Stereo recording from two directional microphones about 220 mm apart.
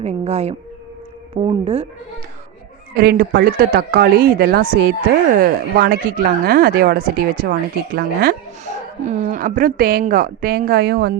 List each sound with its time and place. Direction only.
0.0 s speech: 30° right (ahead or behind)
2.9 s a woman's voice: 45° right (ahead or behind)